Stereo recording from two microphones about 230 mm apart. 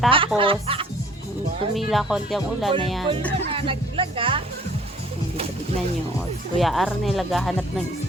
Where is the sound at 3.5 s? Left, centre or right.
Right.